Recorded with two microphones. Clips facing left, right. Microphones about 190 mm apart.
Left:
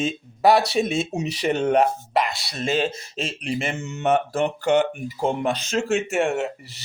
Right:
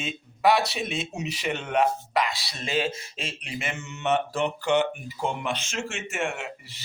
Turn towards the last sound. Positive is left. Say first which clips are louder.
# left 8 dB
turn(degrees=40)  # may be behind; listen again after turning